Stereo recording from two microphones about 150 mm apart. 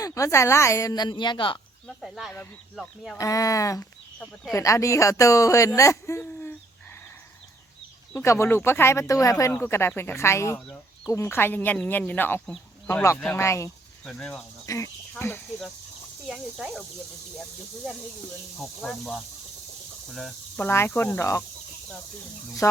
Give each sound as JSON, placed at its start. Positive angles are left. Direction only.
{"t": 0.0, "sound": "speech", "side_deg": 20}
{"t": 2.0, "sound": "speech", "side_deg": 0}
{"t": 3.2, "sound": "speech", "side_deg": 20}
{"t": 8.1, "sound": "speech", "side_deg": 20}
{"t": 14.0, "sound": "speech", "side_deg": 5}
{"t": 14.7, "sound": "speech", "side_deg": 20}
{"t": 16.3, "sound": "speech", "side_deg": 0}
{"t": 18.8, "sound": "speech", "side_deg": 5}
{"t": 20.6, "sound": "speech", "side_deg": 15}
{"t": 22.6, "sound": "speech", "side_deg": 20}